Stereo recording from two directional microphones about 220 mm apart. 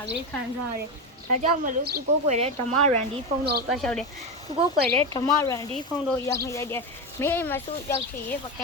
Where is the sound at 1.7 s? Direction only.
40° right (ahead or behind).